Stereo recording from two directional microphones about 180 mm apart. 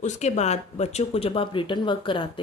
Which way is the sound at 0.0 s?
40° left (ahead or behind).